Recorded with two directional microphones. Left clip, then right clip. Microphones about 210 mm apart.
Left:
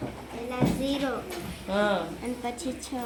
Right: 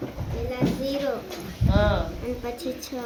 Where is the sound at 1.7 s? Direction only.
30° left (ahead or behind).